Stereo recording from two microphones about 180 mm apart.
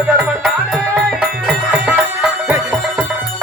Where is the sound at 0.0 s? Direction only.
10° right (ahead or behind).